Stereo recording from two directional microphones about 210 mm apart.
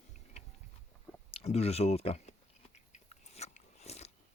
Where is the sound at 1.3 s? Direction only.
30° left (ahead or behind).